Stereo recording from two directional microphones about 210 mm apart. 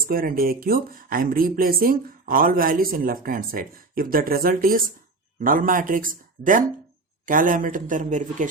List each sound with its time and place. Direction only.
0.0 s speech: 45° right (ahead or behind)